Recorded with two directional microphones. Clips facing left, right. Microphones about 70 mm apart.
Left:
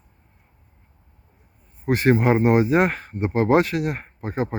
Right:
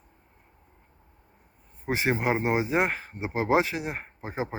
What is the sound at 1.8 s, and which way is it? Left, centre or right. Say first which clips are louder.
Speech: left 8 dB; centre.